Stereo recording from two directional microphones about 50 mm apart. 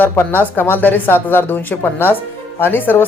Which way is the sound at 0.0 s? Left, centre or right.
Left.